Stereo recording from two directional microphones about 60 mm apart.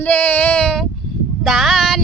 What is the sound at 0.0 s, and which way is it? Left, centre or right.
Child singing, left.